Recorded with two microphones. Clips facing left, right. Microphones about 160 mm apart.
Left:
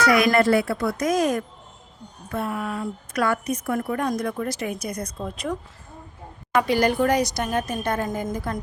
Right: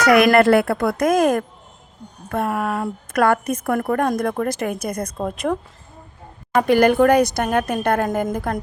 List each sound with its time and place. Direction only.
0.0 s a woman's voice: 65° right (ahead or behind)